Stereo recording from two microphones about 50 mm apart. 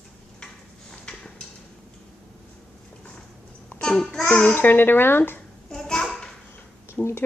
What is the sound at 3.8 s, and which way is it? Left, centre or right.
Speech, centre.